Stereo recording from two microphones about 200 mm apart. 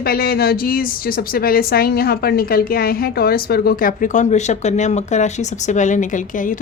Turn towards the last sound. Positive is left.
turn(degrees=40)  # may be behind; listen again after turning